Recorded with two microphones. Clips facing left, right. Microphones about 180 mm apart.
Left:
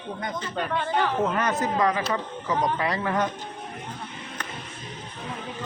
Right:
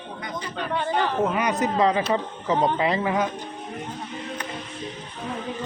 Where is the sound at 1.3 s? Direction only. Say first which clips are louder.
Right 2 dB; 15° right (ahead or behind).